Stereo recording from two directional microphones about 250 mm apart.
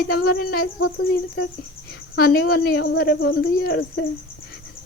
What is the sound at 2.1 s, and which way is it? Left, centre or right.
Speech, left.